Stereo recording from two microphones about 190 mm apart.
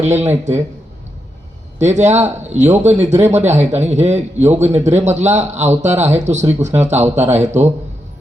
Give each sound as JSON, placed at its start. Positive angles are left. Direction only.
{"t": 0.0, "sound": "a man's voice", "side_deg": -35}
{"t": 1.8, "sound": "a man's voice", "side_deg": -35}